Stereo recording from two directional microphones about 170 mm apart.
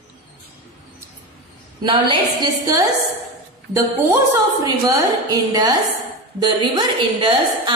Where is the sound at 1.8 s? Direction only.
30° right (ahead or behind).